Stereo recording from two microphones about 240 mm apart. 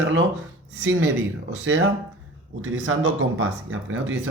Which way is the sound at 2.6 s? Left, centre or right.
Right.